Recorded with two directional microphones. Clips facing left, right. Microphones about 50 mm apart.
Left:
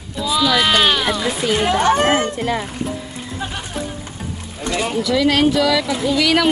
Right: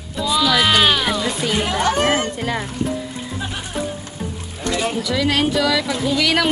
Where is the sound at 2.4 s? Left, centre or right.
Centre.